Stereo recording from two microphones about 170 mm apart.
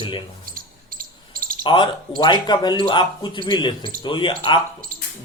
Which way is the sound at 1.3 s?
55° right (ahead or behind).